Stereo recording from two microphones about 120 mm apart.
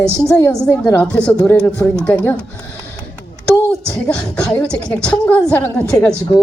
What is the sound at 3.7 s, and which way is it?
A woman's voice, 10° left (ahead or behind).